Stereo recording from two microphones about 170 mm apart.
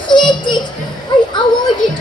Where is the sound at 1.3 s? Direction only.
25° left (ahead or behind).